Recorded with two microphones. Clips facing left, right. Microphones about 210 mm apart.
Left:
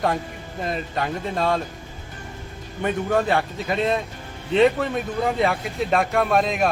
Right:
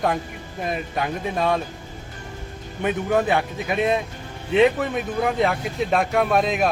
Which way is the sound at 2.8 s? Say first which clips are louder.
Right 1 dB; 10° right (ahead or behind).